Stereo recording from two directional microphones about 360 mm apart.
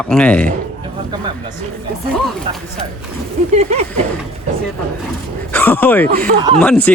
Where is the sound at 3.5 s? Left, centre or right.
Centre.